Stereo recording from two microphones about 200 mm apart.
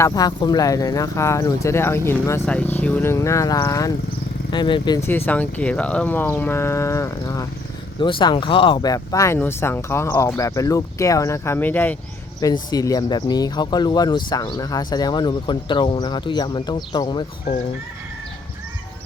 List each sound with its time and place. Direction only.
0.0 s speech: 20° left (ahead or behind)
5.0 s speech: 10° left (ahead or behind)